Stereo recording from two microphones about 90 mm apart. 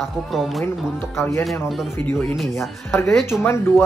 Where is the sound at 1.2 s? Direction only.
30° left (ahead or behind).